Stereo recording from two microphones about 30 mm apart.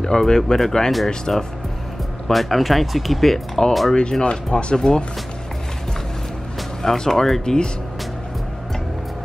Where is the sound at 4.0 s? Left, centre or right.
Left.